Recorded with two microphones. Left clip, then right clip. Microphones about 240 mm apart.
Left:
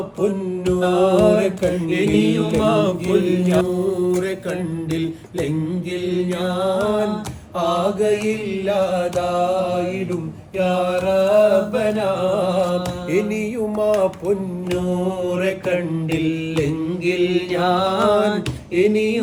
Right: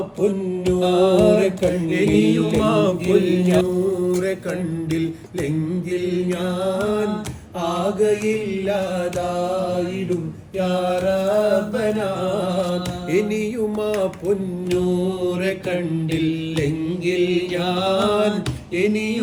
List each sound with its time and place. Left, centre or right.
0.2 s mantra: centre
4.9 s a sound: centre
5.9 s mantra: centre
15.4 s carnatic music: centre
17.1 s mantra: left
17.5 s music: centre
18.8 s mantra: centre